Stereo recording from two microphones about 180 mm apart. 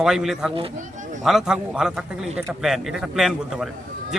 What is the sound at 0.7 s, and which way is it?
Speech, 45° right (ahead or behind).